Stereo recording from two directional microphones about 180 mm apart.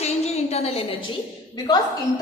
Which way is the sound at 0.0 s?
35° left (ahead or behind).